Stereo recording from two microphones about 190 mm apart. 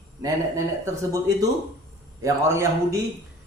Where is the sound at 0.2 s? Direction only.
15° right (ahead or behind).